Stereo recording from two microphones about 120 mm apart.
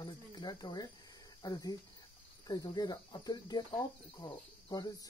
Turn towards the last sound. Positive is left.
turn(degrees=35)  # may be behind; listen again after turning